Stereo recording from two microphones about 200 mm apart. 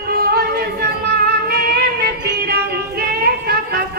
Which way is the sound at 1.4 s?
50° right (ahead or behind).